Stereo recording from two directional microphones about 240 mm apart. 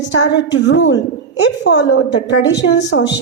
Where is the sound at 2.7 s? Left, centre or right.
Left.